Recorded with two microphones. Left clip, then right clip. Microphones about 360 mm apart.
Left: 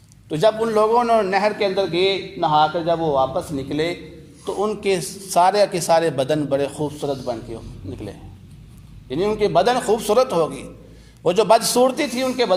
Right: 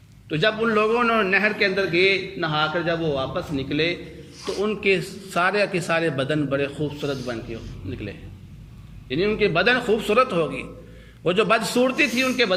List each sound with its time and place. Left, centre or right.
0.3 s a man's voice: centre
9.0 s a man's voice: centre